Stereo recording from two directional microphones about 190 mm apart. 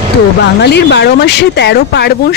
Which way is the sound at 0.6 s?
60° left (ahead or behind).